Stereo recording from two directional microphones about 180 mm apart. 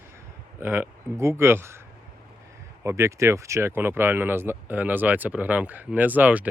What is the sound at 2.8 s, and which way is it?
Speech, 15° right (ahead or behind).